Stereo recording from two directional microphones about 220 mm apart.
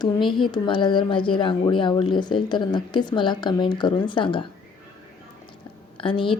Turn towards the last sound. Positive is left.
turn(degrees=25)  # may be behind; listen again after turning